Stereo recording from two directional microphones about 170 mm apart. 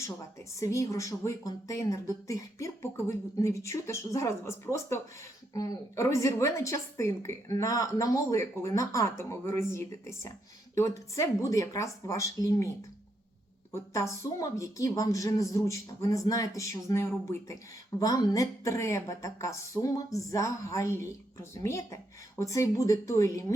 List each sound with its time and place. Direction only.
0.5 s a woman's voice: 15° left (ahead or behind)
13.9 s a woman's voice: 20° left (ahead or behind)